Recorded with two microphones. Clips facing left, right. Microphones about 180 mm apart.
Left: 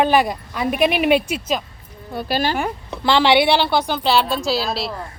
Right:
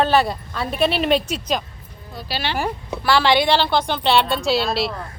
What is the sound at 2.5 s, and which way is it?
Speech, centre (ahead or behind).